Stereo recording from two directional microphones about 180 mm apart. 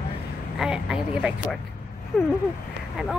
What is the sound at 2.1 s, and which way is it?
Speech, centre (ahead or behind).